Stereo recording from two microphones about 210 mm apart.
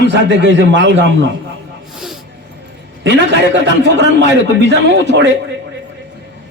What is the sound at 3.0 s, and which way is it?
A man's voice, 55° right (ahead or behind).